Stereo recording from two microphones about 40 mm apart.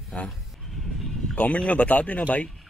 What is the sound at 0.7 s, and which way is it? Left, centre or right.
Music, centre.